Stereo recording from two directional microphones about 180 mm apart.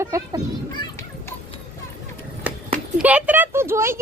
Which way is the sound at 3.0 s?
10° right (ahead or behind).